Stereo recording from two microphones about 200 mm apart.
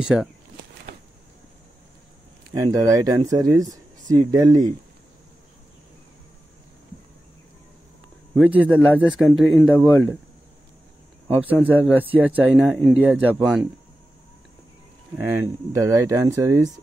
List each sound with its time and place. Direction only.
0.0 s speech: 5° right (ahead or behind)
2.5 s speech: 15° right (ahead or behind)
8.4 s speech: 5° right (ahead or behind)
11.6 s speech: 10° right (ahead or behind)
15.4 s speech: 15° right (ahead or behind)